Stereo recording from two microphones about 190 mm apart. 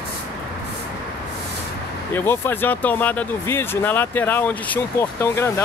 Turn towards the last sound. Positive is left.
turn(degrees=15)  # may be behind; listen again after turning